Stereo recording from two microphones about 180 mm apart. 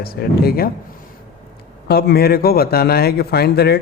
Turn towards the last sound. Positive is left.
turn(degrees=65)  # may be behind; listen again after turning